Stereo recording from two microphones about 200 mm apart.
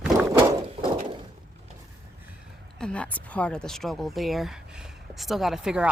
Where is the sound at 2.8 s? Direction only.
5° left (ahead or behind).